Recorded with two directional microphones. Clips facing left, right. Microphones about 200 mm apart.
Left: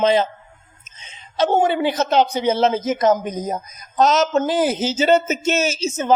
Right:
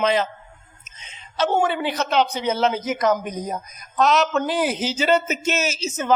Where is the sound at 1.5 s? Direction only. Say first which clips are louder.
Left 4 dB; 30° left (ahead or behind).